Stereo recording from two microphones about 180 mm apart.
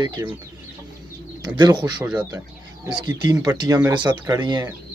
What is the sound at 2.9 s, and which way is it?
Speech, 25° right (ahead or behind).